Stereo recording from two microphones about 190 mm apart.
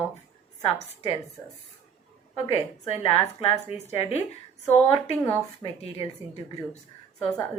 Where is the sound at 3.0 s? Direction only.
30° left (ahead or behind).